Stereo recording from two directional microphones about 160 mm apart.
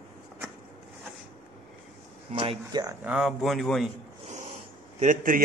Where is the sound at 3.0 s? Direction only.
Centre (ahead or behind).